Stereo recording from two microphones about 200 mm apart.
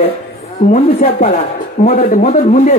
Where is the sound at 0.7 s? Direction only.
40° left (ahead or behind).